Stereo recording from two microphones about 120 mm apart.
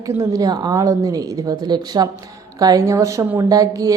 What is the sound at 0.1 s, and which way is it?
A woman's voice, 25° right (ahead or behind).